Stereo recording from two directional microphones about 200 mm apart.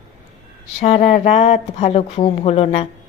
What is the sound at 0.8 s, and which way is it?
Speech, 30° left (ahead or behind).